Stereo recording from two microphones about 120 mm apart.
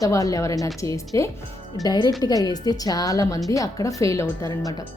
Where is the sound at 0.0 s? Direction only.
30° left (ahead or behind).